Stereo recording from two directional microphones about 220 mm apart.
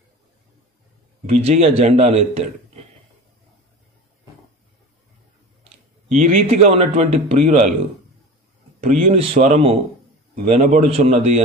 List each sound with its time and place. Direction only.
1.2 s a man's voice: 30° right (ahead or behind)
6.0 s a man's voice: 35° right (ahead or behind)
9.1 s a man's voice: 30° right (ahead or behind)